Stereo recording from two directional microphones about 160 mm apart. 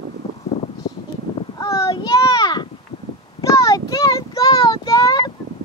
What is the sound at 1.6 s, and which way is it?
Child singing, 20° left (ahead or behind).